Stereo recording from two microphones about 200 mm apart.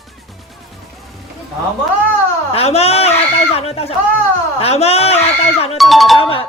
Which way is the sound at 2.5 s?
30° left (ahead or behind).